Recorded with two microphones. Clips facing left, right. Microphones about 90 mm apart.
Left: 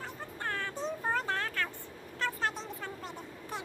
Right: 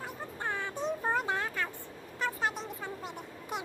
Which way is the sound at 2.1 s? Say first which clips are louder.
Right 1 dB; 10° right (ahead or behind).